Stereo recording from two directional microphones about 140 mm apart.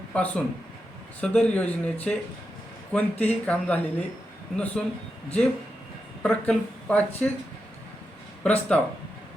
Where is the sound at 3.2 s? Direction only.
10° left (ahead or behind).